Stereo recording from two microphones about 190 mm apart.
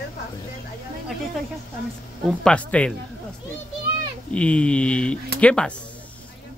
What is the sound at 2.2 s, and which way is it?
Speech, 5° left (ahead or behind).